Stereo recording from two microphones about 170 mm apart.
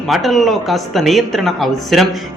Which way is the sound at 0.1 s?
Centre (ahead or behind).